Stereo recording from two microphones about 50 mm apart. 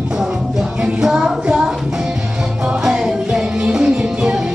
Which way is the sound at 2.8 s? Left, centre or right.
Centre.